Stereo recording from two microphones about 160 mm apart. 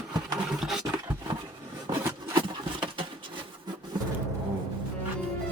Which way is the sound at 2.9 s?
35° right (ahead or behind).